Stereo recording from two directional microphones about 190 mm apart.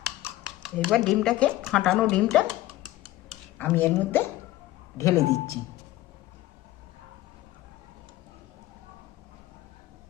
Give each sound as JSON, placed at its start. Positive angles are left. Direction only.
{"t": 0.6, "sound": "speech", "side_deg": 0}
{"t": 3.6, "sound": "speech", "side_deg": 10}